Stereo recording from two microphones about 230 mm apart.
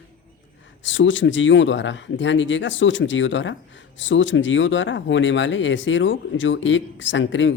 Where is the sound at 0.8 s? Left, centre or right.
Left.